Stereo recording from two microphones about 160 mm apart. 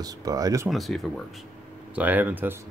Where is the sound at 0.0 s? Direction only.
25° right (ahead or behind).